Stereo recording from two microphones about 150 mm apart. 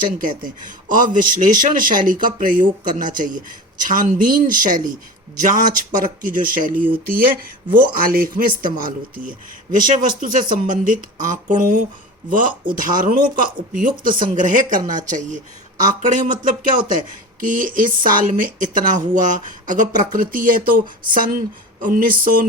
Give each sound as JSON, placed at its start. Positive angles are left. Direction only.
{"t": 0.0, "sound": "speech", "side_deg": -65}
{"t": 7.0, "sound": "speech", "side_deg": -80}